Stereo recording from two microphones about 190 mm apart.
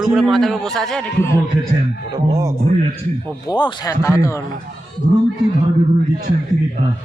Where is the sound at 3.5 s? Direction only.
20° left (ahead or behind).